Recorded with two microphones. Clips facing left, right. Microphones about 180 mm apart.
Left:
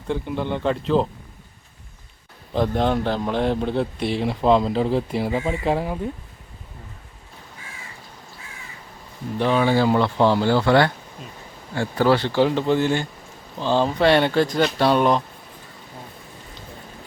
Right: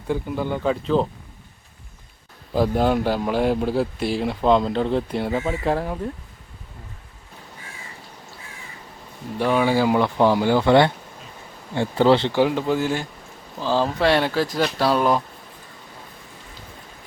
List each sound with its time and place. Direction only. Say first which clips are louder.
0.1 s a man's voice: even; 5° right (ahead or behind)
2.5 s a man's voice: right 1 dB; 5° right (ahead or behind)
9.4 s speech: even; 10° right (ahead or behind)
12.4 s a man's voice: left 1 dB; 10° right (ahead or behind)